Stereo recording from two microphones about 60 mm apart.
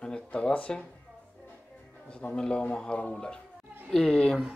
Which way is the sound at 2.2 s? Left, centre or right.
Centre.